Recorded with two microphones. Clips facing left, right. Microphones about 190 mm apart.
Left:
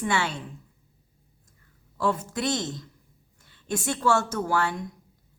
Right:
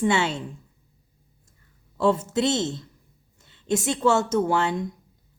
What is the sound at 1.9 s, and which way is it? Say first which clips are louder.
A woman's voice: right 5 dB; 25° right (ahead or behind).